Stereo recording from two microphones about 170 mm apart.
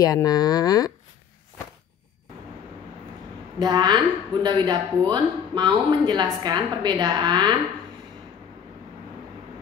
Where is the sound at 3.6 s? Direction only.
25° right (ahead or behind).